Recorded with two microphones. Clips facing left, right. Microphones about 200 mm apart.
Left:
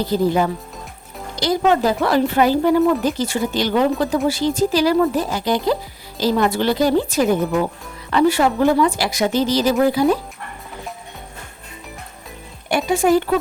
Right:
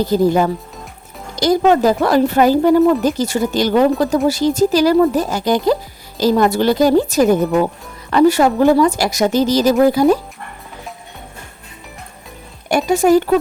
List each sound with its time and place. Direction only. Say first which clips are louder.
0.1 s a woman's voice: right 2 dB; 45° right (ahead or behind)
12.6 s speech: right 4 dB; 40° right (ahead or behind)